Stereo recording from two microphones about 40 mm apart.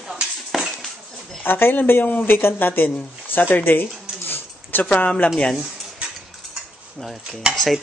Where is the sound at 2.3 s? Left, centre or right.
Left.